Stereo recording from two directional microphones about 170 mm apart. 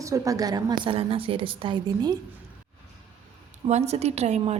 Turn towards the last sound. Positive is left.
turn(degrees=-40)  # may be behind; listen again after turning